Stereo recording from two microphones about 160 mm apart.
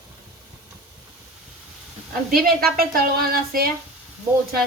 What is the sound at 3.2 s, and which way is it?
Speech, 65° right (ahead or behind).